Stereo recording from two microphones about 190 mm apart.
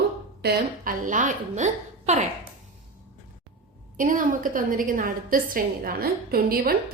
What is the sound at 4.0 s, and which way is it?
A woman's voice, 45° right (ahead or behind).